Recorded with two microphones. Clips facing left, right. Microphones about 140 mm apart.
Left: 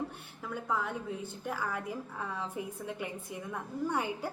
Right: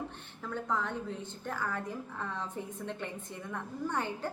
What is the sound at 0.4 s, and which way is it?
A woman's voice, 10° left (ahead or behind).